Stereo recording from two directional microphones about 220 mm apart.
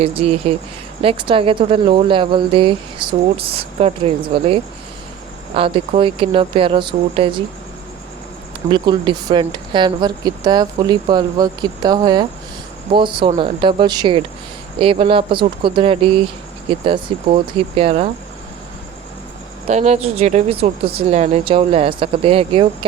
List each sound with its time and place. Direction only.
0.0 s speech: 25° right (ahead or behind)
8.7 s speech: 20° right (ahead or behind)
19.6 s speech: 30° right (ahead or behind)